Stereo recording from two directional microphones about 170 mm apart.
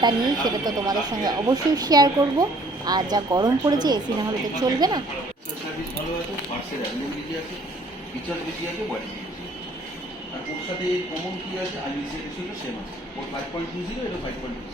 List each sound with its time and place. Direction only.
0.0 s speech: 25° right (ahead or behind)